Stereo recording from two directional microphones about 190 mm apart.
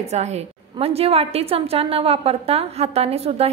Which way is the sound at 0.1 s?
35° right (ahead or behind).